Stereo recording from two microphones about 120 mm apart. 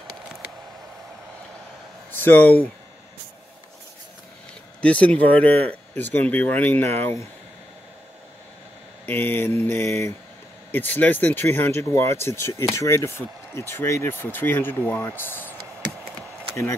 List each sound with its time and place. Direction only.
2.0 s speech: 15° left (ahead or behind)
4.8 s speech: 10° left (ahead or behind)
9.0 s mantra: 15° left (ahead or behind)
10.7 s speech: 15° left (ahead or behind)